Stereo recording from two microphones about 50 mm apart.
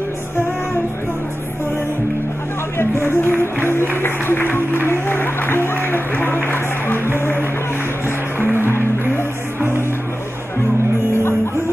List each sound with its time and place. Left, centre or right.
2.8 s music: left